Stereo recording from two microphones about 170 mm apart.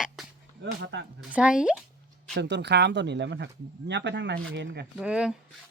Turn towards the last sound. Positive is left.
turn(degrees=-5)  # may be behind; listen again after turning